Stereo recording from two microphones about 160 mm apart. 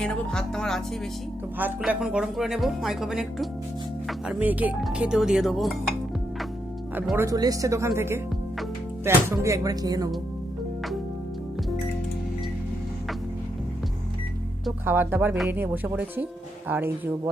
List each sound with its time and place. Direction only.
0.0 s speech: 5° left (ahead or behind)
1.8 s speech: 5° right (ahead or behind)
7.2 s speech: 20° right (ahead or behind)
14.8 s speech: 15° right (ahead or behind)